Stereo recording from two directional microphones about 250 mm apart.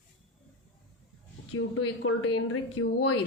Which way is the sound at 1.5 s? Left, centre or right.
Left.